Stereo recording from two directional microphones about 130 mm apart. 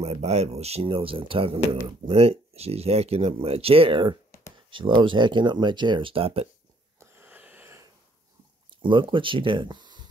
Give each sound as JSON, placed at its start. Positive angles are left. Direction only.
{"t": 0.0, "sound": "speech", "side_deg": -55}
{"t": 7.0, "sound": "wheeze", "side_deg": -15}
{"t": 8.6, "sound": "speech", "side_deg": -40}